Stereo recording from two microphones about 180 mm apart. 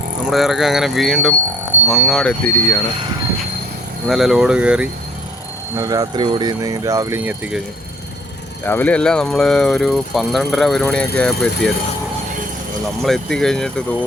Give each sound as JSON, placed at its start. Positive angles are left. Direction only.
{"t": 0.3, "sound": "speech", "side_deg": 0}
{"t": 2.4, "sound": "speech", "side_deg": 15}
{"t": 4.1, "sound": "speech", "side_deg": 0}
{"t": 5.7, "sound": "speech", "side_deg": -20}
{"t": 8.6, "sound": "speech", "side_deg": 10}
{"t": 13.0, "sound": "speech", "side_deg": 0}